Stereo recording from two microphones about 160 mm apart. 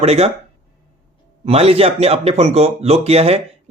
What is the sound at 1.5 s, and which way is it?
Speech, 40° right (ahead or behind).